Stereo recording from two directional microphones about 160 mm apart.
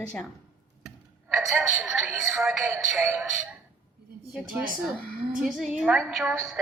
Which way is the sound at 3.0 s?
15° right (ahead or behind).